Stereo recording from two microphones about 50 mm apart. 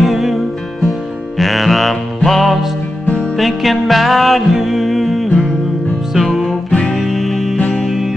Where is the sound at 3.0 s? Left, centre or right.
Left.